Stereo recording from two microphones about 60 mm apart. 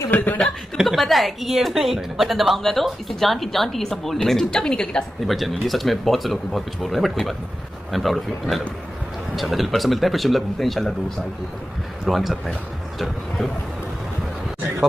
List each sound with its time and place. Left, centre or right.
0.1 s speech: left
0.8 s a woman's voice: centre
5.2 s a woman's voice: centre